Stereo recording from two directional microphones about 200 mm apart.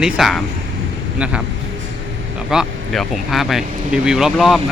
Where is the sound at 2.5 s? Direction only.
Centre (ahead or behind).